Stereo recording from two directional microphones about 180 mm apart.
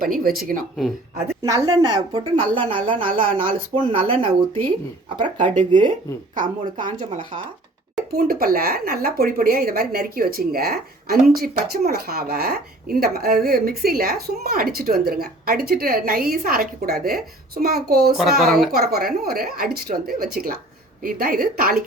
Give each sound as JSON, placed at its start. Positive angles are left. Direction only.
{"t": 0.0, "sound": "speech", "side_deg": -50}
{"t": 1.4, "sound": "a woman's voice", "side_deg": -20}
{"t": 3.1, "sound": "speech", "side_deg": -50}
{"t": 3.8, "sound": "a woman's voice", "side_deg": -30}
{"t": 5.4, "sound": "speech", "side_deg": -45}
{"t": 8.1, "sound": "speech", "side_deg": -55}
{"t": 18.2, "sound": "speech", "side_deg": 0}
{"t": 18.7, "sound": "speech", "side_deg": -60}